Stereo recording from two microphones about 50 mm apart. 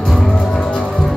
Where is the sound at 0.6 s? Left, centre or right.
Centre.